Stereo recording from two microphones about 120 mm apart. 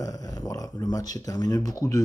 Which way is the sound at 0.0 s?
30° left (ahead or behind).